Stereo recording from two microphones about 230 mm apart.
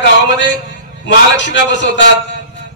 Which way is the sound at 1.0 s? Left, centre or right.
Left.